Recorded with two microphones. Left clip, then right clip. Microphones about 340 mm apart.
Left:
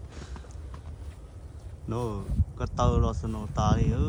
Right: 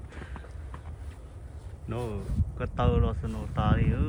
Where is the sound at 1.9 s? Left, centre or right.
Centre.